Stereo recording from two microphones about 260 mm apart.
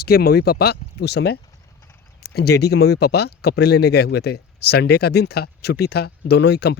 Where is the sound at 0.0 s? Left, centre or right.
Left.